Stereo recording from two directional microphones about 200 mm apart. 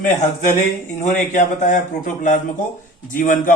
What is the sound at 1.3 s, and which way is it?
Speech, 35° left (ahead or behind).